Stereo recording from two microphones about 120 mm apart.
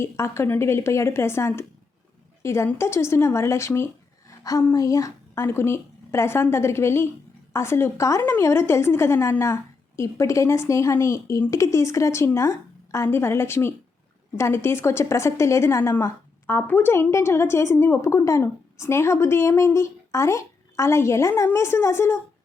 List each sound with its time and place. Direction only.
0.0 s a woman's voice: 20° left (ahead or behind)